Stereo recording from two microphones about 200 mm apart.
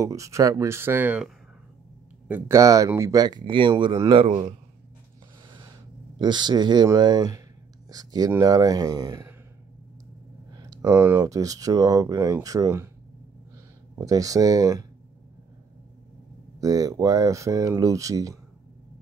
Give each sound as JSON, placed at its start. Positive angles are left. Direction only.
{"t": 0.0, "sound": "speech", "side_deg": -15}
{"t": 6.1, "sound": "speech", "side_deg": -20}
{"t": 10.5, "sound": "speech", "side_deg": -20}
{"t": 13.9, "sound": "speech", "side_deg": -15}
{"t": 16.5, "sound": "speech", "side_deg": -15}